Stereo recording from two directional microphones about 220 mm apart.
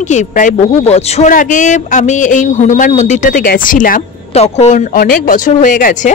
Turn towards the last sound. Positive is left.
turn(degrees=35)  # may be behind; listen again after turning